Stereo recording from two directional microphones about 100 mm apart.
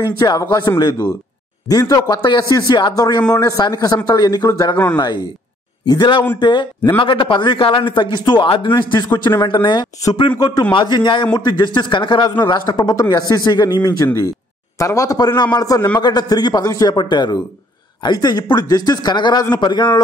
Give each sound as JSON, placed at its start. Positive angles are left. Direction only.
{"t": 0.0, "sound": "speech", "side_deg": 45}
{"t": 1.7, "sound": "speech", "side_deg": 40}
{"t": 3.3, "sound": "a man's voice", "side_deg": 35}